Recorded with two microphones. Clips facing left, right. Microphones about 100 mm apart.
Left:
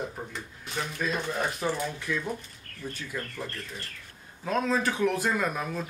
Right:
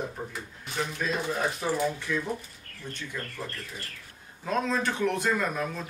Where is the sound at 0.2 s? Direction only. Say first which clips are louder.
Right 1 dB; centre (ahead or behind).